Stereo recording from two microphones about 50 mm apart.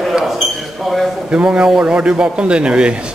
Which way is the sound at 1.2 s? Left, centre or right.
Right.